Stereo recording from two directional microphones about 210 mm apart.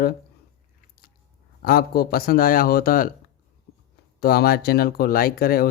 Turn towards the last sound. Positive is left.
turn(degrees=45)  # may be behind; listen again after turning